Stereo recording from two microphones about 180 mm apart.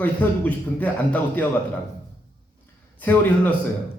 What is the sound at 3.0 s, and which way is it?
Speech, 10° left (ahead or behind).